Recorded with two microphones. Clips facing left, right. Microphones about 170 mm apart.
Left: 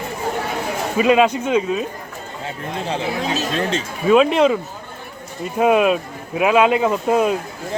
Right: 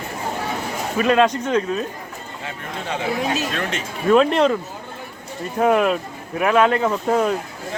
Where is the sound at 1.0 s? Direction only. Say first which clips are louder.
Left 2 dB; 10° left (ahead or behind).